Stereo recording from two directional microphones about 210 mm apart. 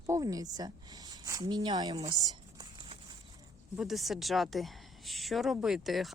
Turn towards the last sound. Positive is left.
turn(degrees=0)  # may be behind; listen again after turning